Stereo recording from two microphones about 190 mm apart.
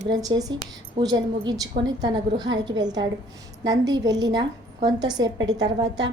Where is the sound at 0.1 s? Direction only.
20° right (ahead or behind).